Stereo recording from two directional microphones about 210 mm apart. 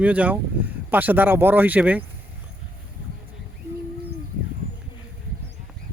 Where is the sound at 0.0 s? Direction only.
5° right (ahead or behind).